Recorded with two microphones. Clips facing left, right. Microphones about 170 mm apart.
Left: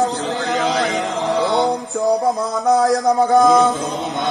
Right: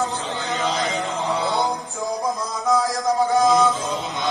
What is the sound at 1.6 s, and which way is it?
Music, 75° left (ahead or behind).